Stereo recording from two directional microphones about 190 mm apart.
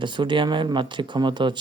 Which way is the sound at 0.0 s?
25° right (ahead or behind).